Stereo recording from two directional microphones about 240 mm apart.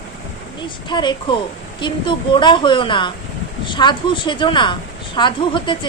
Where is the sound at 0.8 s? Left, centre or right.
Centre.